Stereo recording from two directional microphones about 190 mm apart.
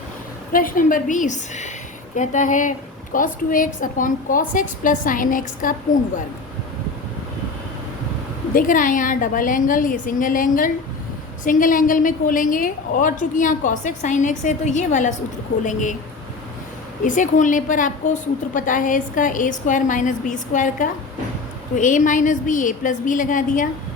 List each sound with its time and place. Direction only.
0.5 s a woman's voice: 45° left (ahead or behind)
8.5 s a woman's voice: 45° left (ahead or behind)
17.0 s a woman's voice: 40° left (ahead or behind)